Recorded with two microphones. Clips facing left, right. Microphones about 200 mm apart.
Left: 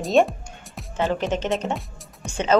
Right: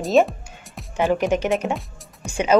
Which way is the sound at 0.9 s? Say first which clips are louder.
Right 4 dB; 15° right (ahead or behind).